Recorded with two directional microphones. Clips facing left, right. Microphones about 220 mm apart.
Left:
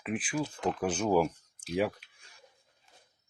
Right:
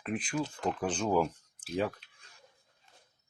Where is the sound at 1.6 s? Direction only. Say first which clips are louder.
Left 2 dB; 10° left (ahead or behind).